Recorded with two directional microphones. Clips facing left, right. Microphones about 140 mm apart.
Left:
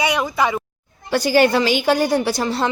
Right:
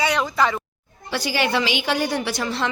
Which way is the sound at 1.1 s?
45° left (ahead or behind).